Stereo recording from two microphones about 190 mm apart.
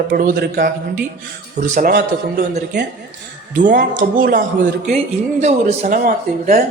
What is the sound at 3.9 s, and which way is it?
A man's voice, 45° right (ahead or behind).